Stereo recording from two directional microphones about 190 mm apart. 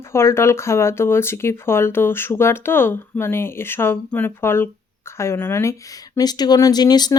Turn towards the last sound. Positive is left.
turn(degrees=20)  # may be behind; listen again after turning